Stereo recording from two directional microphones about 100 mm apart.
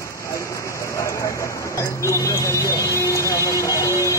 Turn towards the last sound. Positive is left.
turn(degrees=30)  # may be behind; listen again after turning